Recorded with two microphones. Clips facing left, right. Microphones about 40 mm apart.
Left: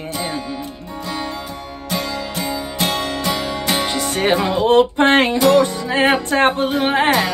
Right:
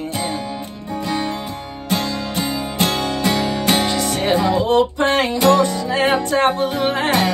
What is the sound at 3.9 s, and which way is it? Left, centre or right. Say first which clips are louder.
Music: even; left.